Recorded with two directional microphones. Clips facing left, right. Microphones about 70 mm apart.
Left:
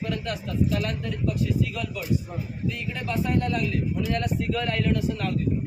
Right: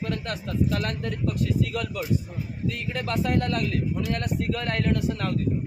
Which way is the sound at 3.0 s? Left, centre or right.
Right.